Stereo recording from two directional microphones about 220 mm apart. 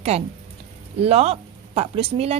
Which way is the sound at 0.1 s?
30° right (ahead or behind).